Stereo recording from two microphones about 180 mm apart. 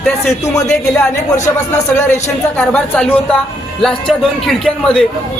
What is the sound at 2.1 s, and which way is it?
Speech, 5° left (ahead or behind).